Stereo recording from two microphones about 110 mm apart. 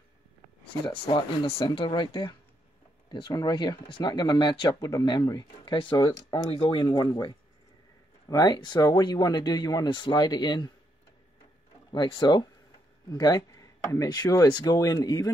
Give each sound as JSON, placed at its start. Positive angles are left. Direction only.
{"t": 1.0, "sound": "speech", "side_deg": 60}
{"t": 1.7, "sound": "speech", "side_deg": 45}
{"t": 11.9, "sound": "speech", "side_deg": 45}